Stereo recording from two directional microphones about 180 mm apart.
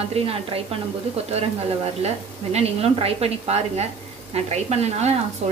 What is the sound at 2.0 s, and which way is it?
A woman's voice, 35° right (ahead or behind).